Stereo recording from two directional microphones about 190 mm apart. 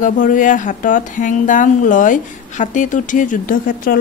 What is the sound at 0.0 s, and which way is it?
A woman's voice, 45° left (ahead or behind).